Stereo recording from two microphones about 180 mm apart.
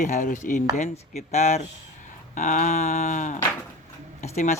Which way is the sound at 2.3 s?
45° left (ahead or behind).